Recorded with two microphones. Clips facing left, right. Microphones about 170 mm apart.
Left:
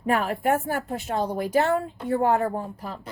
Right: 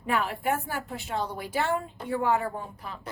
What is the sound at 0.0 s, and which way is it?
A woman's voice, 45° left (ahead or behind).